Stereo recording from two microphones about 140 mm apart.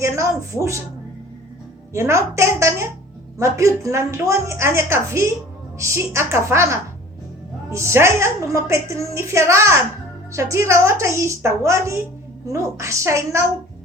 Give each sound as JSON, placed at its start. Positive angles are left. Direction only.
{"t": 0.0, "sound": "a woman's voice", "side_deg": -20}
{"t": 1.9, "sound": "a woman's voice", "side_deg": -20}